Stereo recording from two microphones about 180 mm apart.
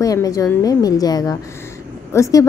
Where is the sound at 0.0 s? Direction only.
20° left (ahead or behind).